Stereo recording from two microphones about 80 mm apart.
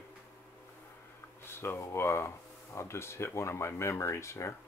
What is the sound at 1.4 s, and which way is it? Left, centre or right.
Speech, left.